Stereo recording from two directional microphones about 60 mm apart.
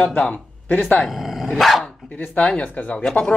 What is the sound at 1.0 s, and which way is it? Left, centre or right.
Dog, centre.